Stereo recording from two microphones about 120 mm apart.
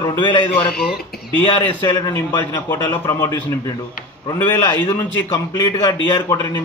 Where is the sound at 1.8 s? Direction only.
35° left (ahead or behind).